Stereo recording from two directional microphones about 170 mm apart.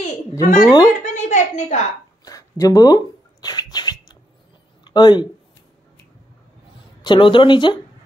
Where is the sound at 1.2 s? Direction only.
45° left (ahead or behind).